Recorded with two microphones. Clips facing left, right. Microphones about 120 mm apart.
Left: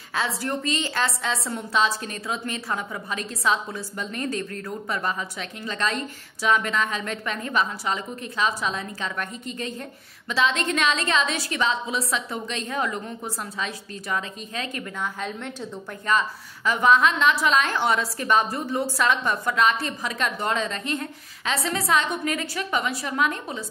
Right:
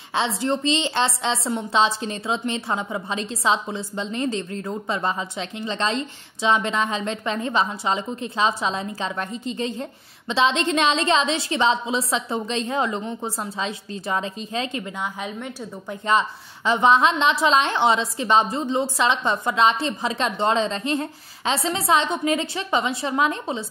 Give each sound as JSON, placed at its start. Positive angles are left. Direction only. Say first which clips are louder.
{"t": 0.1, "sound": "a woman's voice", "louder": "right 4 dB", "side_deg": -25}
{"t": 16.1, "sound": "a woman's voice", "louder": "right 3 dB", "side_deg": -25}